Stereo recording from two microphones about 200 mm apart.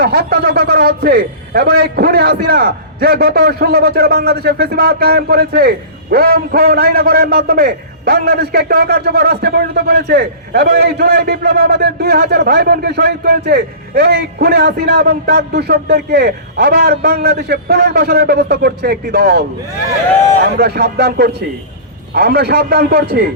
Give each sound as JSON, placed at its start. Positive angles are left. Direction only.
{"t": 0.0, "sound": "a man's voice", "side_deg": -50}